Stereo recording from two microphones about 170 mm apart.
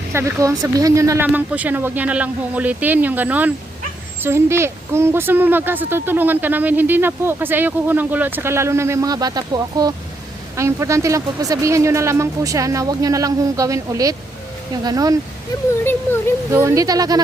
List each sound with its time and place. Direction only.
0.1 s a woman's voice: 15° right (ahead or behind)
15.8 s speech: 15° left (ahead or behind)
16.5 s speech: 15° right (ahead or behind)